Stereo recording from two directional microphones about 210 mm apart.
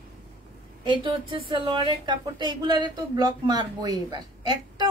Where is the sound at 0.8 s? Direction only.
20° right (ahead or behind).